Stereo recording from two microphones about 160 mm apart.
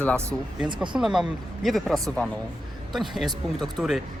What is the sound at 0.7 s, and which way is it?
Speech, 30° right (ahead or behind).